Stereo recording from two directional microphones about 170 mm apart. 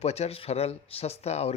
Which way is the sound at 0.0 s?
40° left (ahead or behind).